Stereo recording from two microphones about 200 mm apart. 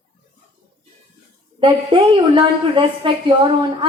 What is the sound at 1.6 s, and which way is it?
A woman's voice, 25° right (ahead or behind).